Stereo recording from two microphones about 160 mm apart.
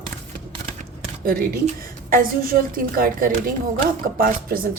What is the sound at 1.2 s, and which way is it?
Speech, 65° right (ahead or behind).